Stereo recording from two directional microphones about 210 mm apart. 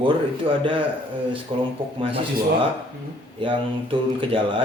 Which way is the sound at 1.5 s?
25° right (ahead or behind).